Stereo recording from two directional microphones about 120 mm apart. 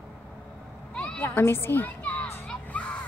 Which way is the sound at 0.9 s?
10° left (ahead or behind).